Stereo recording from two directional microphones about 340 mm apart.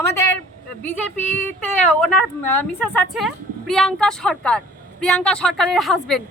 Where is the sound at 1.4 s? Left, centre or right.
Centre.